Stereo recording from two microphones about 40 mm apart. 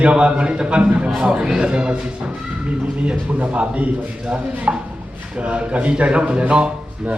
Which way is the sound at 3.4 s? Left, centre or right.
Right.